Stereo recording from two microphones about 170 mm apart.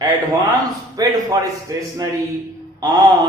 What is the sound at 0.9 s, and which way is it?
A man's voice, 20° right (ahead or behind).